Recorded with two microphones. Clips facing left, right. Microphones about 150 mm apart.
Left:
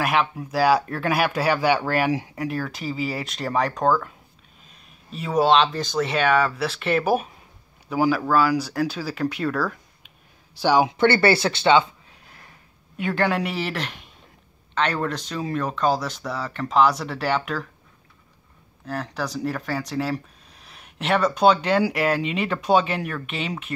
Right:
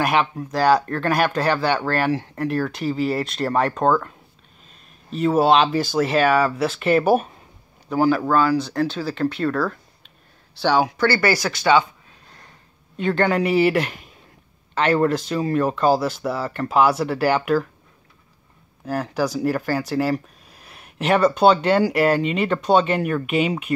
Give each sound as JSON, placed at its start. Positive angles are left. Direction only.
{"t": 0.0, "sound": "speech", "side_deg": 0}
{"t": 5.1, "sound": "speech", "side_deg": 0}
{"t": 10.9, "sound": "speech", "side_deg": 25}
{"t": 12.9, "sound": "speech", "side_deg": 5}
{"t": 18.9, "sound": "speech", "side_deg": -10}